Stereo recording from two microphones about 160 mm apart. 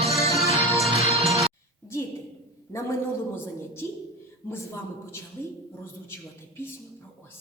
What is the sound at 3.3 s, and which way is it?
A woman's voice, 15° left (ahead or behind).